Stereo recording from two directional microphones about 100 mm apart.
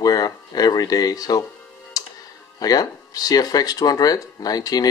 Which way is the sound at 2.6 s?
40° left (ahead or behind).